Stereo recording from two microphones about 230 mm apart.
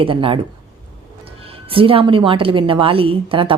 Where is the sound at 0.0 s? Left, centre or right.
Right.